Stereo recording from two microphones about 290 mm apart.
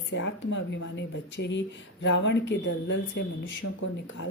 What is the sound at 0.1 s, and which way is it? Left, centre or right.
Speech, left.